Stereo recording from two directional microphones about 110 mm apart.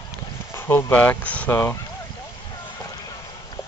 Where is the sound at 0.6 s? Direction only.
20° left (ahead or behind).